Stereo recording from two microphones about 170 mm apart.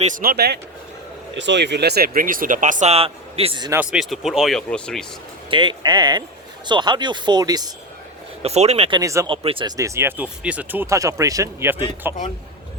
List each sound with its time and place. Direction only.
0.0 s speech: 55° right (ahead or behind); by 0.6 s 70° right (ahead or behind)
1.4 s speech: 90° right; by 3.7 s 30° right (ahead or behind)
3.7 s speech: 5° right (ahead or behind)
5.5 s speech: 25° right (ahead or behind)
8.4 s speech: 40° right (ahead or behind)
9.0 s speech: 20° right (ahead or behind)
9.3 s speech: 30° right (ahead or behind)
9.7 s speech: 15° right (ahead or behind)